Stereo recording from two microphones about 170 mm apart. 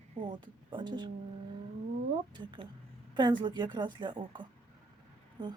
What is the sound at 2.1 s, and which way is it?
A woman's voice, 30° right (ahead or behind).